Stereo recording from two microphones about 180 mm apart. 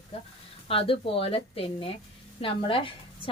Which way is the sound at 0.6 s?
30° left (ahead or behind).